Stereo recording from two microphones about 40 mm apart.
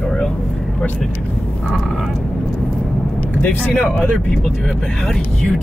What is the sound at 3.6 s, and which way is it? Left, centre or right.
Speech, left.